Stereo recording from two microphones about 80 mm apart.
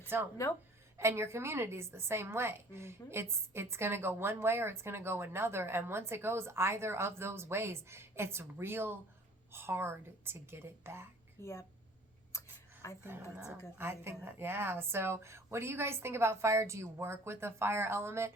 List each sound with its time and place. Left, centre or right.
0.1 s a woman's voice: right
11.3 s a woman's voice: left
12.3 s a sound: left
12.8 s a woman's voice: left
13.7 s a woman's voice: right